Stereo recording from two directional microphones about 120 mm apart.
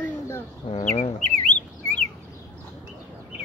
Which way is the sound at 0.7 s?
60° left (ahead or behind).